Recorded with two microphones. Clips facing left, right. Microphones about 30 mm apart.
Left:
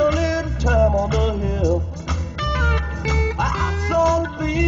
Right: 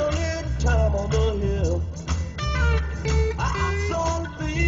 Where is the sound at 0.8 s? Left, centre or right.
Left.